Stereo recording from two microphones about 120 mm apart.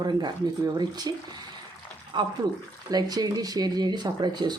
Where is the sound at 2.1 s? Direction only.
40° right (ahead or behind).